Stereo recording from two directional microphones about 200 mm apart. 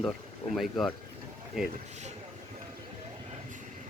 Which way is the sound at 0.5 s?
Centre (ahead or behind).